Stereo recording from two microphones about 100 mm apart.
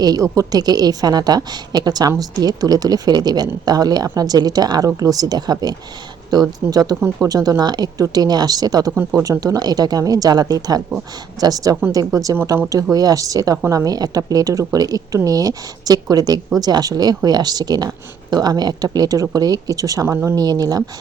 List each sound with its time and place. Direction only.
0.0 s a woman's voice: 35° right (ahead or behind)